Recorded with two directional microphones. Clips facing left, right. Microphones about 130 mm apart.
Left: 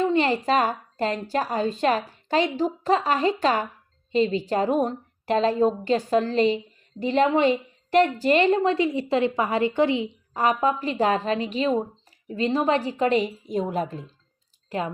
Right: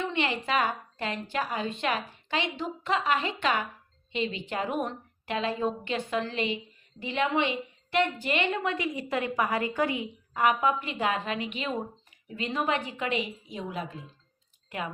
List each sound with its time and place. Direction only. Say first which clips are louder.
0.0 s a woman's voice: left 8 dB; 40° left (ahead or behind)